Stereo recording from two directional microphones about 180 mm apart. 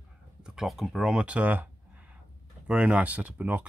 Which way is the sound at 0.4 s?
Centre (ahead or behind).